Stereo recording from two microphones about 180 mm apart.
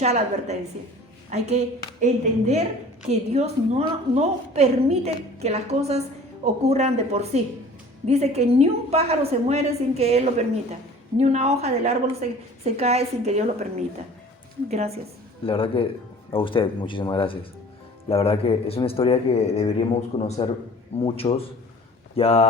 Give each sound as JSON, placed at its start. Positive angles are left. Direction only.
{"t": 0.0, "sound": "a woman's voice", "side_deg": -40}
{"t": 15.4, "sound": "a man's voice", "side_deg": 30}